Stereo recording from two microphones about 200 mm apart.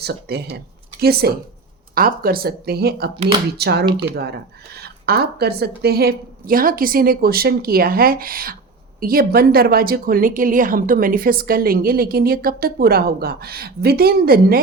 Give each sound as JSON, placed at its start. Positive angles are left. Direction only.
{"t": 0.0, "sound": "a woman's voice", "side_deg": -55}